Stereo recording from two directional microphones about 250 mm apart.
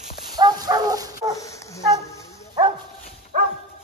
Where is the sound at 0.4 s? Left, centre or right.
Centre.